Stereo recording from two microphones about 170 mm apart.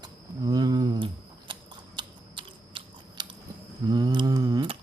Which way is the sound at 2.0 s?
30° right (ahead or behind).